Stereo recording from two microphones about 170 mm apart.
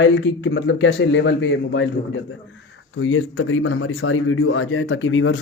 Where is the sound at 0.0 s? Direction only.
90° left.